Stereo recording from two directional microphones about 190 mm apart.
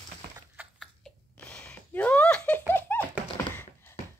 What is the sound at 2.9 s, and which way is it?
Tap, 10° left (ahead or behind).